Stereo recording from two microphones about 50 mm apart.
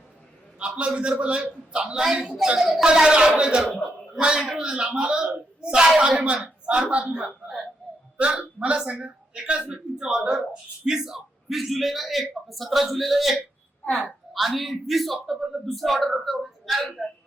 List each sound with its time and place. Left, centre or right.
0.6 s a man's voice: right; by 16.9 s centre